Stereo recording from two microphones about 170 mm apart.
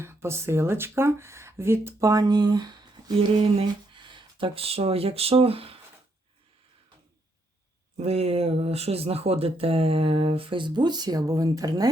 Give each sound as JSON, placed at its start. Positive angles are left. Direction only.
{"t": 0.0, "sound": "speech", "side_deg": -15}
{"t": 7.9, "sound": "speech", "side_deg": -40}